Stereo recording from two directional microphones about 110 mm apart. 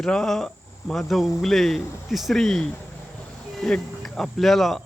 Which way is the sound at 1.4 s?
Centre (ahead or behind).